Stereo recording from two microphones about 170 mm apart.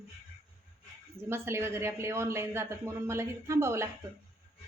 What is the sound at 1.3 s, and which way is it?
Speech, 15° right (ahead or behind).